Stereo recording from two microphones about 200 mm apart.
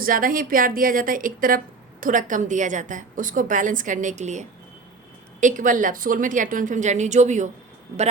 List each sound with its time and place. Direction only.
0.0 s a woman's voice: 45° right (ahead or behind)